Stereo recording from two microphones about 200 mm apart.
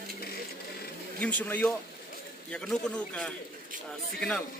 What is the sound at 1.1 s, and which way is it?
Speech, 10° left (ahead or behind).